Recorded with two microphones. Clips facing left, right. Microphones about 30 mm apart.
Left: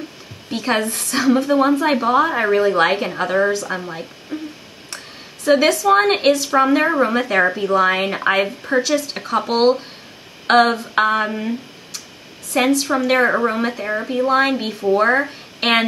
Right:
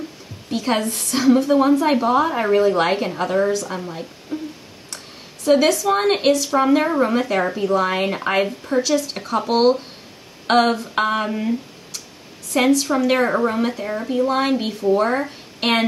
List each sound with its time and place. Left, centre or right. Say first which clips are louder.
0.5 s a woman's voice: left 1 dB; centre
0.8 s a woman's voice: right 1 dB; centre
1.4 s a woman's voice: even; centre
3.2 s speech: left 1 dB; left
4.3 s a sound: even; left
4.9 s a woman's voice: left 3 dB; centre